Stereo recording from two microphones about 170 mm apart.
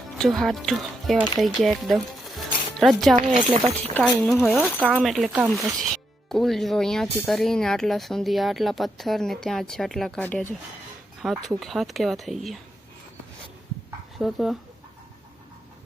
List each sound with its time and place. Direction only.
0.2 s speech: centre (ahead or behind)
3.2 s speech: 40° right (ahead or behind)
4.2 s speech: centre (ahead or behind)
14.2 s speech: centre (ahead or behind)